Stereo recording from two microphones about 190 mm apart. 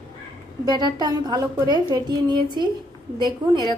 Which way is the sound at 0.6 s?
20° right (ahead or behind).